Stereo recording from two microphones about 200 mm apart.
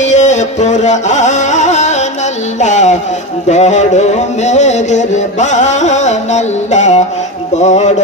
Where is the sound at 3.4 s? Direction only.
35° left (ahead or behind).